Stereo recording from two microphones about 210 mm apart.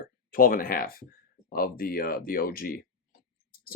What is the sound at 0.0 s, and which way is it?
Speech, 45° left (ahead or behind).